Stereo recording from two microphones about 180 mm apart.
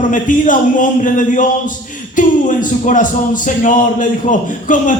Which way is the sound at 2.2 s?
45° left (ahead or behind).